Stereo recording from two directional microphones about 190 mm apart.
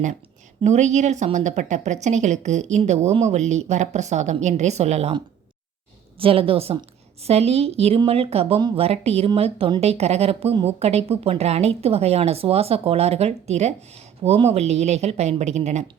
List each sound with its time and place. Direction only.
0.6 s a woman's voice: 35° right (ahead or behind)